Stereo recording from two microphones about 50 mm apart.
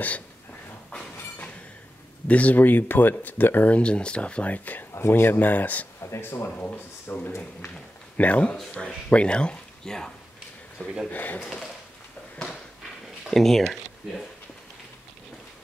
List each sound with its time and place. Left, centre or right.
2.2 s speech: left
3.7 s speech: left
4.9 s speech: left
5.4 s speech: left
6.0 s speech: left
6.6 s speech: left
8.2 s speech: left; by 10.1 s centre
11.1 s speech: left
11.4 s a sound: centre
13.3 s speech: centre